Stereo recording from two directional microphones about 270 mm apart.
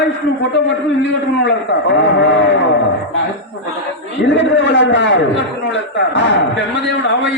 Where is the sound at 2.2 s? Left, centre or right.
Left.